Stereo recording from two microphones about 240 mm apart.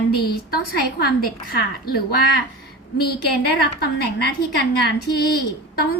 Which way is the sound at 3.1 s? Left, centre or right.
Left.